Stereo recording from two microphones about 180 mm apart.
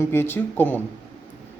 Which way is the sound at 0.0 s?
10° left (ahead or behind).